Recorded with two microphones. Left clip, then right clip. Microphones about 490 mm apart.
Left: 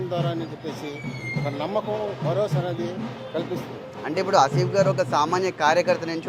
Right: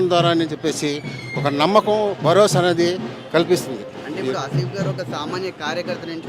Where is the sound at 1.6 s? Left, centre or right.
Right.